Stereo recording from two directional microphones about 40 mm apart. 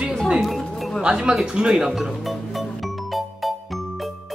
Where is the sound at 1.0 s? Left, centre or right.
Right.